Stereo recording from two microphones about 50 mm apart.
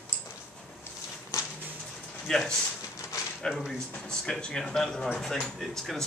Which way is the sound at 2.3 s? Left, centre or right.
Centre.